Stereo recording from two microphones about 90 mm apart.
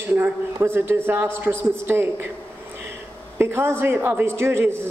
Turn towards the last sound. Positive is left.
turn(degrees=-30)  # may be behind; listen again after turning